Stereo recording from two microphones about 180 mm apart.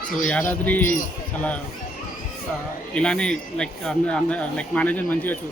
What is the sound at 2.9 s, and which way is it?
Speech, 5° left (ahead or behind).